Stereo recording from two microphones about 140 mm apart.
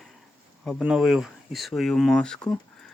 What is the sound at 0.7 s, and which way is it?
Speech, 5° right (ahead or behind).